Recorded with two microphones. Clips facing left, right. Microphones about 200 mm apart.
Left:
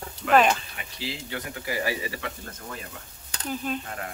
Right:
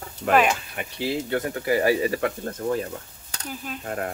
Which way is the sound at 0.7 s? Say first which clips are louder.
Right 9 dB; 55° right (ahead or behind).